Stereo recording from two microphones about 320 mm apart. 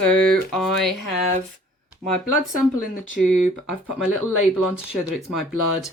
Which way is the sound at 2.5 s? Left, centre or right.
Left.